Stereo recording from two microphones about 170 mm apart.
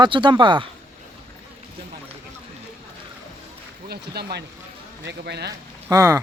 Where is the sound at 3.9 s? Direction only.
70° right (ahead or behind).